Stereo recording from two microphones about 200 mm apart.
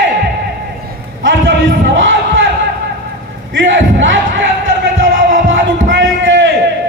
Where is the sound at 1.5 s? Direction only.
70° right (ahead or behind).